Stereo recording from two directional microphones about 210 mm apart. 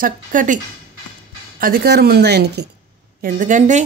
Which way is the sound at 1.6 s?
45° right (ahead or behind).